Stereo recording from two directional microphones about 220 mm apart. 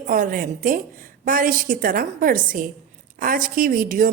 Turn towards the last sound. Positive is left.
turn(degrees=-40)  # may be behind; listen again after turning